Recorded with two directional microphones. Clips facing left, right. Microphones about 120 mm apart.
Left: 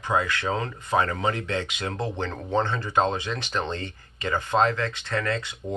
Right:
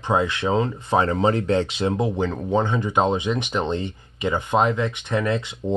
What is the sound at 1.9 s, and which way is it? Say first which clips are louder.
Speech: right 6 dB; 10° right (ahead or behind).